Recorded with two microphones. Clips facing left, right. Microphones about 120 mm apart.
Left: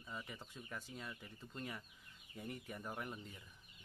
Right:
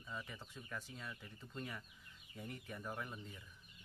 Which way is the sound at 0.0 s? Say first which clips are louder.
Right 1 dB; 15° left (ahead or behind).